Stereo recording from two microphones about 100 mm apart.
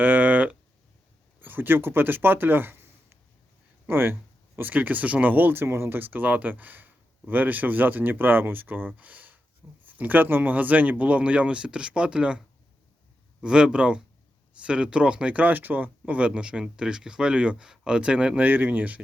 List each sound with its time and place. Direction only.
0.0 s a sound: 15° right (ahead or behind)
1.4 s speech: 20° right (ahead or behind)
13.4 s speech: 10° right (ahead or behind)